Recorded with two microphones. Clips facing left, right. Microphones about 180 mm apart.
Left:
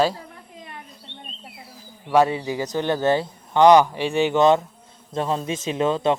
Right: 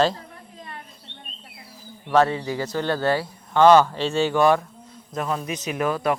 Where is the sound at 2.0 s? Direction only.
15° left (ahead or behind).